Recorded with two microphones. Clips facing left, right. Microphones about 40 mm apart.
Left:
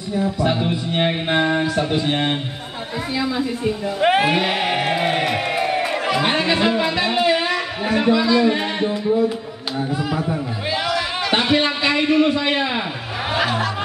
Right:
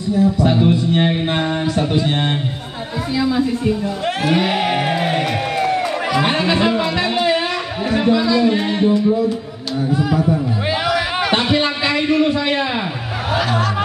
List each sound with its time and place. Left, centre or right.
0.2 s music: centre
3.2 s a woman's voice: centre
4.0 s speech: left
4.5 s music: centre
6.1 s speech: centre
8.3 s music: centre
10.9 s a sound: centre
11.6 s a sound: centre